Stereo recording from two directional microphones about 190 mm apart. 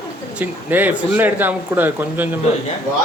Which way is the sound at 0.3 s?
10° right (ahead or behind).